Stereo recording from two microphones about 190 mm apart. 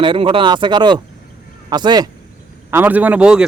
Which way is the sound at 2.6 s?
10° right (ahead or behind).